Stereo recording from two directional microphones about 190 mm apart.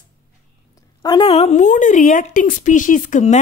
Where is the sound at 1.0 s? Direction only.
25° left (ahead or behind).